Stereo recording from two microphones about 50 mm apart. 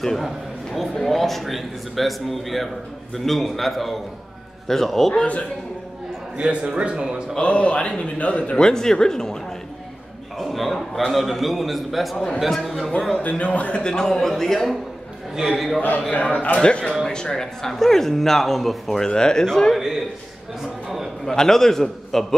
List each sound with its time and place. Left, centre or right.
0.0 s a man's voice: centre
6.5 s a man's voice: right
7.3 s speech: left
10.4 s a man's voice: centre
13.2 s a man's voice: left; by 14.8 s centre
15.3 s a man's voice: centre
16.2 s a man's voice: left
19.7 s a man's voice: centre
20.6 s a sound: centre
21.3 s a man's voice: centre